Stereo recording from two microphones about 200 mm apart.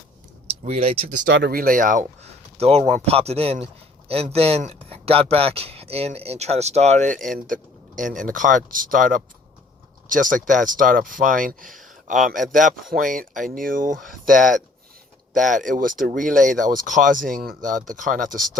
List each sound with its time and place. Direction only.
0.4 s speech: 30° right (ahead or behind)
1.3 s speech: 55° right (ahead or behind)
2.6 s speech: 30° right (ahead or behind)